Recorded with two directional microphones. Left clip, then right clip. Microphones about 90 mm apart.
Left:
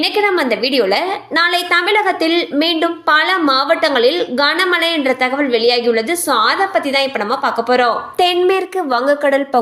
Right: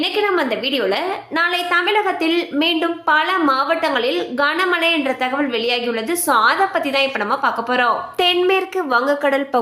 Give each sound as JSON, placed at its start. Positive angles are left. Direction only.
{"t": 0.0, "sound": "a woman's voice", "side_deg": 30}